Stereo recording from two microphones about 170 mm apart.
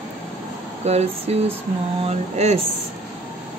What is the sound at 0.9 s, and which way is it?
Speech, 40° right (ahead or behind).